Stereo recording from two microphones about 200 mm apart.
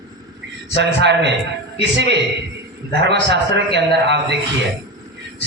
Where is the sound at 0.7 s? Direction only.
60° right (ahead or behind).